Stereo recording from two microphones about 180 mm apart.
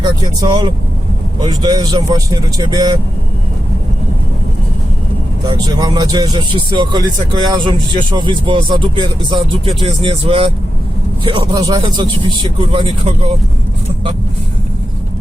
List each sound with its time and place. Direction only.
0.0 s speech: 20° right (ahead or behind)
5.5 s speech: 20° right (ahead or behind)